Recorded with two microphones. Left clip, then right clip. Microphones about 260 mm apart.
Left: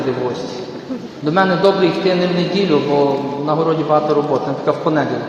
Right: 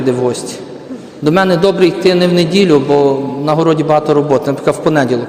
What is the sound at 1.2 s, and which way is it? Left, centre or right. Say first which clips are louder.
A man's voice: right 3 dB; right.